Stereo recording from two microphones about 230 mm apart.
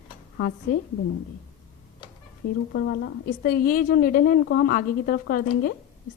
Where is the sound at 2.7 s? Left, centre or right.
Left.